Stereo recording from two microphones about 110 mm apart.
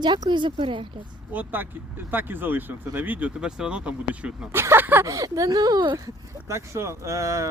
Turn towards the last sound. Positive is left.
turn(degrees=-30)  # may be behind; listen again after turning